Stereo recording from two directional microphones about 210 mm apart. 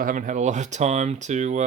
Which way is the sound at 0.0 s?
40° right (ahead or behind).